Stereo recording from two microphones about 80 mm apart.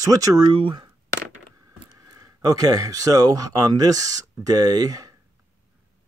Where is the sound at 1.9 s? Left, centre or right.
Right.